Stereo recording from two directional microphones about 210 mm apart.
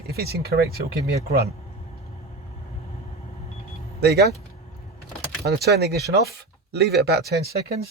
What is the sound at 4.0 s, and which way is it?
Speech, 50° right (ahead or behind).